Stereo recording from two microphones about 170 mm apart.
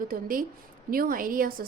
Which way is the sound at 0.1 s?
55° right (ahead or behind).